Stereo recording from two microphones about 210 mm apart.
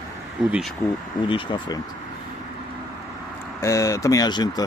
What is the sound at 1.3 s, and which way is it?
Speech, 20° left (ahead or behind).